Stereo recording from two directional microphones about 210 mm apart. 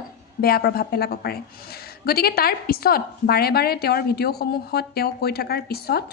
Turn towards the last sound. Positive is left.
turn(degrees=50)  # may be behind; listen again after turning